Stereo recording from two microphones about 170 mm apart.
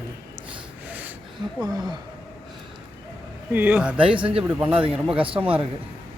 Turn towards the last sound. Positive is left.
turn(degrees=-10)  # may be behind; listen again after turning